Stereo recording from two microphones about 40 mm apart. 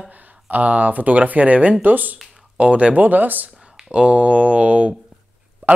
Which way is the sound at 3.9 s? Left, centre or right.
Right.